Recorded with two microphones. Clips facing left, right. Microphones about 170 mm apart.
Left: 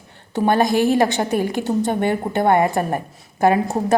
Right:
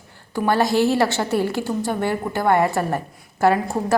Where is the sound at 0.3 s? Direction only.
20° left (ahead or behind).